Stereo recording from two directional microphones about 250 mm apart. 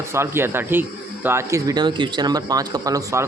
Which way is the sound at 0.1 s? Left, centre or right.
Centre.